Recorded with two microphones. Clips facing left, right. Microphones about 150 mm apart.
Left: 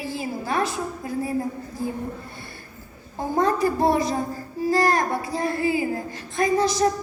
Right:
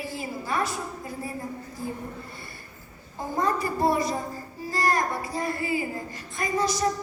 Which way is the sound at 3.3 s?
80° left.